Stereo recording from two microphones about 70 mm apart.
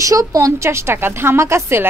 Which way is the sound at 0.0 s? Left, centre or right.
Right.